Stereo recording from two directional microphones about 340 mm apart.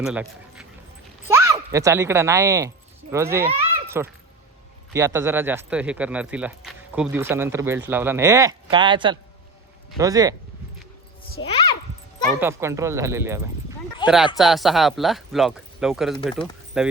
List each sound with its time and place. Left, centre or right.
0.0 s speech: centre
11.4 s speech: left
12.4 s speech: centre
14.0 s a sound: centre
14.3 s speech: centre